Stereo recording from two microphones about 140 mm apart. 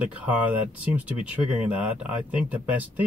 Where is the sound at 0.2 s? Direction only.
10° right (ahead or behind).